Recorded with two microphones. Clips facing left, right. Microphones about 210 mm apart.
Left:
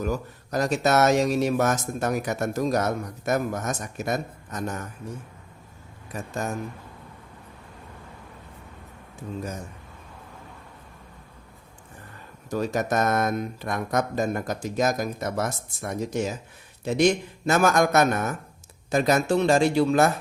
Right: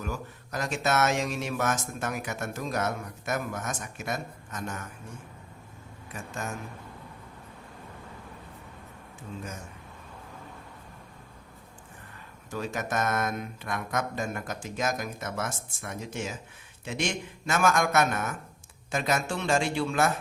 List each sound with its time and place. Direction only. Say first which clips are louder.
0.0 s speech: left 8 dB; 40° left (ahead or behind)
6.1 s speech: left 6 dB; 40° left (ahead or behind)
12.5 s speech: left 7 dB; 40° left (ahead or behind)